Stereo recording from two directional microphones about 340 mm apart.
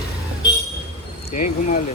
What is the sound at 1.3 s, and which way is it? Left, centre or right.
Speech, left.